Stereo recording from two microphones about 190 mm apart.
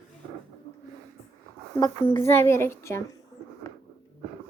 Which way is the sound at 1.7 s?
20° left (ahead or behind).